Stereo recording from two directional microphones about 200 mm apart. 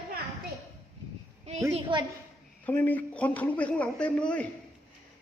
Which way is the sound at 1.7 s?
25° right (ahead or behind).